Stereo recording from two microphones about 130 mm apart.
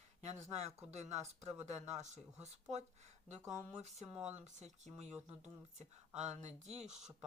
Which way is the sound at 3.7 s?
55° right (ahead or behind).